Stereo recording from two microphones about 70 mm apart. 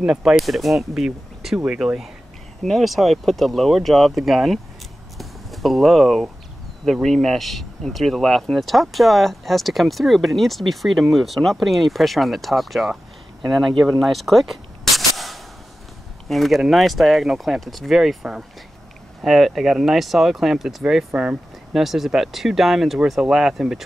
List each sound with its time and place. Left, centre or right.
0.0 s speech: centre
5.1 s a sound: centre
6.8 s speech: centre
15.0 s a sound: centre
16.3 s speech: centre
21.1 s speech: right
21.7 s speech: centre